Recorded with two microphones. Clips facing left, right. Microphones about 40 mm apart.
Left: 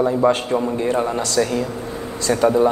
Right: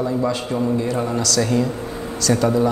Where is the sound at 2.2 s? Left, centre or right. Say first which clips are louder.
Left 2 dB; left.